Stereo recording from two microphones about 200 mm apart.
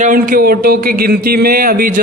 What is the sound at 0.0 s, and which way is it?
A man's voice, 45° right (ahead or behind).